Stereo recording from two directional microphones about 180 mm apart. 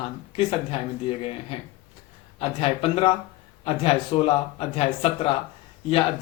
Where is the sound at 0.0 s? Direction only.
30° left (ahead or behind).